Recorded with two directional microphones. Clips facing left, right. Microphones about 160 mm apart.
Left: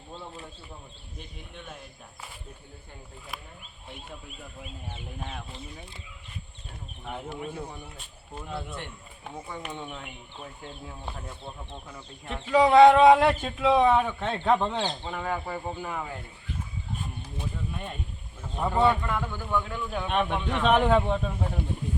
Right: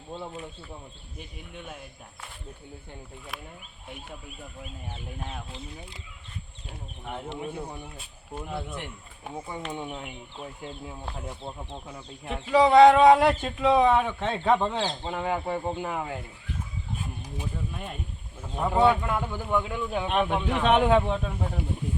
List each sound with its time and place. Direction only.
5.2 s speech: centre (ahead or behind)
7.0 s speech: centre (ahead or behind)
7.6 s speech: 15° right (ahead or behind)
11.9 s speech: 5° right (ahead or behind)
15.0 s speech: 20° right (ahead or behind)
17.7 s speech: centre (ahead or behind); by 20.1 s 15° right (ahead or behind)
20.1 s speech: 5° right (ahead or behind)